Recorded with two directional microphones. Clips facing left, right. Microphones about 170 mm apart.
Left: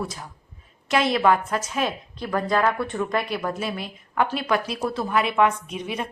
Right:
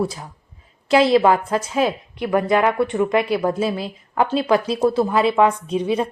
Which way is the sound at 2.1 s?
15° right (ahead or behind).